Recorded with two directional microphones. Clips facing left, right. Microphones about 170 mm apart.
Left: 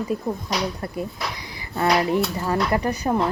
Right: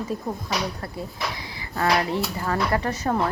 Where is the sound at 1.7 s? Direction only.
25° left (ahead or behind).